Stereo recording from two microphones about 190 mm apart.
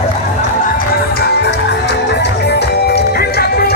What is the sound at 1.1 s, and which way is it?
Music, 60° left (ahead or behind).